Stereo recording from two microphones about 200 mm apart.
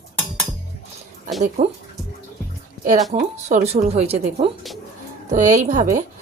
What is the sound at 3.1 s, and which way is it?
Speech, 40° right (ahead or behind).